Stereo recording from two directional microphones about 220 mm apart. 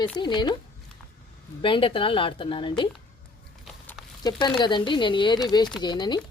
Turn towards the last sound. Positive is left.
turn(degrees=20)  # may be behind; listen again after turning